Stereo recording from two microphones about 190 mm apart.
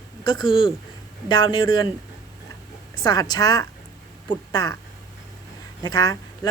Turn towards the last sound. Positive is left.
turn(degrees=20)  # may be behind; listen again after turning